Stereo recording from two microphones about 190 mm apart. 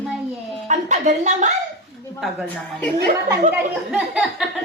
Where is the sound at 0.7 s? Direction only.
40° right (ahead or behind).